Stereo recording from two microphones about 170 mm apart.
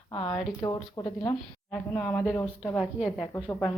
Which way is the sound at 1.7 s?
5° left (ahead or behind).